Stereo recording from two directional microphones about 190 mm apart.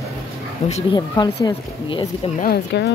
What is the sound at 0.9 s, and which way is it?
Speech, 20° left (ahead or behind).